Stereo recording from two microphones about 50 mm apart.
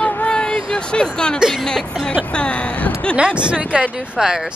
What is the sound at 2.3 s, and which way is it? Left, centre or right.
Speech, left.